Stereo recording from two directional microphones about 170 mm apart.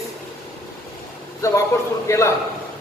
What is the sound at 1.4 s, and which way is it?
Speech, 15° left (ahead or behind).